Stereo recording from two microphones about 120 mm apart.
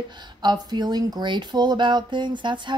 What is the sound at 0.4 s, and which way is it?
Speech, 35° right (ahead or behind).